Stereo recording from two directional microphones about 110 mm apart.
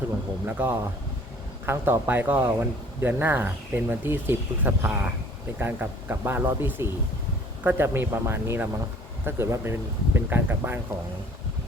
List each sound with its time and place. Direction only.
0.4 s speech: 20° right (ahead or behind)